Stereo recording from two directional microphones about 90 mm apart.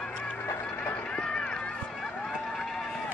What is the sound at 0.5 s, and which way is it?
Music, 25° left (ahead or behind).